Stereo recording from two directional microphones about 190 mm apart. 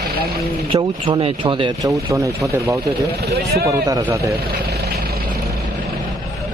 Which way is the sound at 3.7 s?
15° right (ahead or behind).